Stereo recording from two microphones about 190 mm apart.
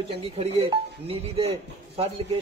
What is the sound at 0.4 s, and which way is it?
A man's voice, 30° right (ahead or behind).